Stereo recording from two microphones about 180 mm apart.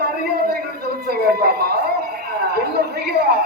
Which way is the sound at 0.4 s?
55° right (ahead or behind).